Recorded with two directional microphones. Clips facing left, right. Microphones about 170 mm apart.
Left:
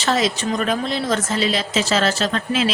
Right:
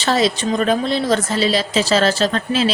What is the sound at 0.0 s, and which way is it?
A woman's voice, 30° right (ahead or behind).